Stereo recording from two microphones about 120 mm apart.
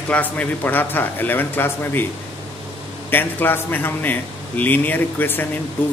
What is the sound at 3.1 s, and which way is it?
A man's voice, 15° left (ahead or behind).